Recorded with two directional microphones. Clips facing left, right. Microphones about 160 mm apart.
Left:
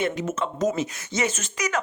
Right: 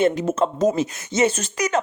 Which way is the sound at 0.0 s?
35° right (ahead or behind).